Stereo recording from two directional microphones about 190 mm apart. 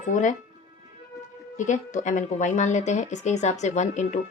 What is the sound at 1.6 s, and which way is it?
Speech, 40° left (ahead or behind).